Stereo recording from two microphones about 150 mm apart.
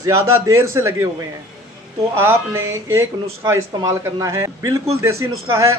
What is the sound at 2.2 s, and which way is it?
Speech, 15° right (ahead or behind).